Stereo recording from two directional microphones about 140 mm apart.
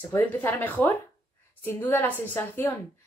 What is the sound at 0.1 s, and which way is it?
A woman's voice, 15° left (ahead or behind).